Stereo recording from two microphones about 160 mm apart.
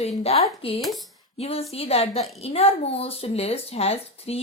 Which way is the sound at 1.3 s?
40° left (ahead or behind).